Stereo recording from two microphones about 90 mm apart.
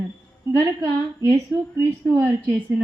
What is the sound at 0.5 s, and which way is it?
Speech, 35° right (ahead or behind).